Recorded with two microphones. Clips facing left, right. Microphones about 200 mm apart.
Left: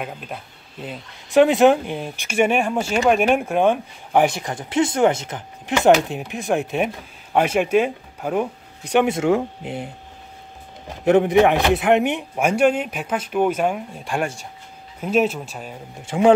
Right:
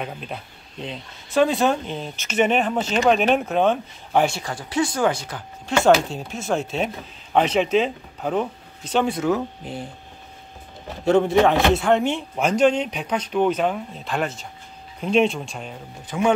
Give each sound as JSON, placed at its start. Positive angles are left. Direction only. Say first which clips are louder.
{"t": 0.0, "sound": "speech", "louder": "even", "side_deg": 5}
{"t": 1.3, "sound": "speech", "louder": "left 5 dB", "side_deg": 20}
{"t": 11.1, "sound": "speech", "louder": "left 2 dB", "side_deg": 20}
{"t": 16.1, "sound": "speech", "louder": "left 6 dB", "side_deg": 30}